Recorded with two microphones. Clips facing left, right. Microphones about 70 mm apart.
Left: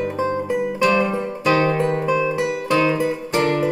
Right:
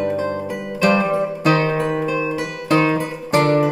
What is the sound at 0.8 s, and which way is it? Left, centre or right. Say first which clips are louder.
Music: right 2 dB; right.